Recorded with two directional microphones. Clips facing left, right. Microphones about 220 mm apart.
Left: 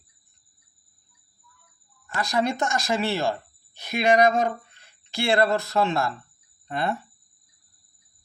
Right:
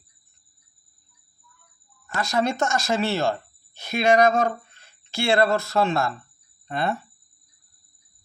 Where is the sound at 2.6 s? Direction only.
15° left (ahead or behind).